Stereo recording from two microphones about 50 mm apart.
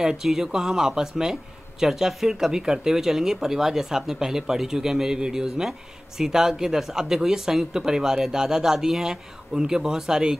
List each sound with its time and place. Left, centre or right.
0.0 s speech: centre